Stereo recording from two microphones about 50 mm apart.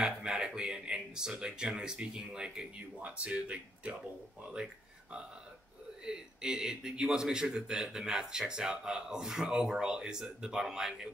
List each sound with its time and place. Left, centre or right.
0.0 s speech: centre
6.0 s a man's voice: centre